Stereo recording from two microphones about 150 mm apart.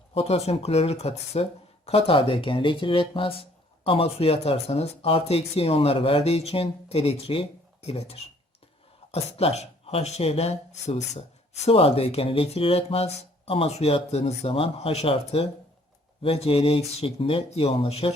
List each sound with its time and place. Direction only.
0.1 s speech: 40° left (ahead or behind)